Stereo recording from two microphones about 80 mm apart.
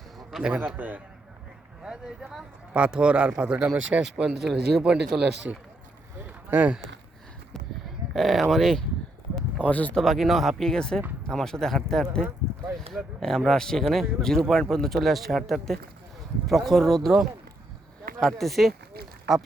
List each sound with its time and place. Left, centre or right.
0.3 s a man's voice: centre
0.6 s a man's voice: right
1.8 s a man's voice: centre
8.1 s speech: centre
9.6 s speech: centre
10.0 s speech: centre
13.1 s speech: centre